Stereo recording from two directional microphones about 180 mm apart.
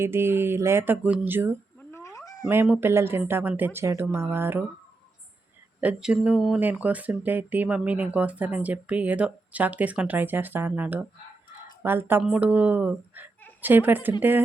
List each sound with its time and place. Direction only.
0.0 s speech: 15° right (ahead or behind)
1.8 s cat: 15° left (ahead or behind)
2.5 s speech: 10° right (ahead or behind)
5.8 s speech: 5° right (ahead or behind)